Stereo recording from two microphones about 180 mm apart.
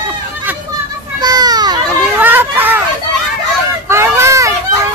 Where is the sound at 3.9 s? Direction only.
15° right (ahead or behind).